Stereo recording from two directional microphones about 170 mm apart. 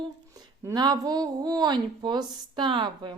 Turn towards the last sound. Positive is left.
turn(degrees=-25)  # may be behind; listen again after turning